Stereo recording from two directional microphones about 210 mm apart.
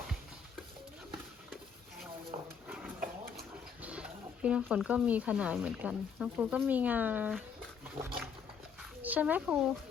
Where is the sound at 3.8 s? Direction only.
5° right (ahead or behind).